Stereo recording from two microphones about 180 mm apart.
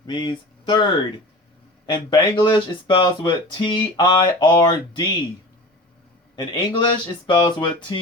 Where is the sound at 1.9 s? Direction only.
25° left (ahead or behind).